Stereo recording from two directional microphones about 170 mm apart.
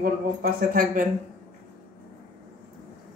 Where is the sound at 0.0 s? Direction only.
60° right (ahead or behind).